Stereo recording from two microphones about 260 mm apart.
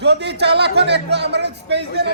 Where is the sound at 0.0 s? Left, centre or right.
Right.